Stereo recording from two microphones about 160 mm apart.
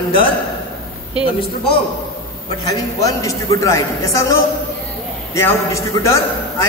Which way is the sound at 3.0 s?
20° left (ahead or behind).